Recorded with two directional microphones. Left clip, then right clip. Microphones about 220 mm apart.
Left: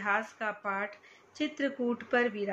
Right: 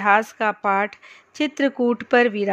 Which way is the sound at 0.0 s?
55° right (ahead or behind).